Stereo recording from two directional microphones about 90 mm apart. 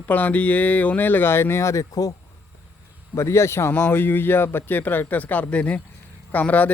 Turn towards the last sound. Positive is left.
turn(degrees=15)  # may be behind; listen again after turning